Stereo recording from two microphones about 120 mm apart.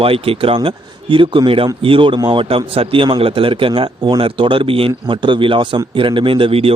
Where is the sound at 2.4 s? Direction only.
55° right (ahead or behind).